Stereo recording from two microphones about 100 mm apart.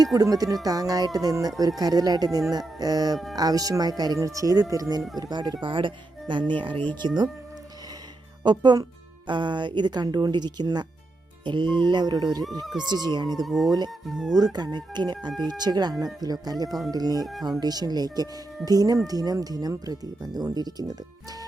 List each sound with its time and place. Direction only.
0.0 s speech: 40° right (ahead or behind); by 6.8 s 55° right (ahead or behind)
8.4 s speech: 45° right (ahead or behind)
13.4 s speech: centre (ahead or behind)
14.3 s speech: 45° right (ahead or behind)
16.6 s speech: centre (ahead or behind)
16.9 s speech: 40° right (ahead or behind)